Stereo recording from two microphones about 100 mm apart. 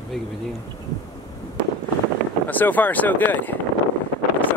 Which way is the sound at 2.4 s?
20° left (ahead or behind).